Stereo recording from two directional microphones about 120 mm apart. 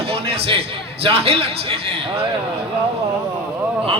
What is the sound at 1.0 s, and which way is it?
A man's voice, 55° right (ahead or behind).